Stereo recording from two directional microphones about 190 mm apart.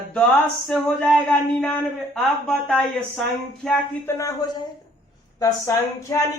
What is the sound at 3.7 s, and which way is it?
Speech, 15° left (ahead or behind).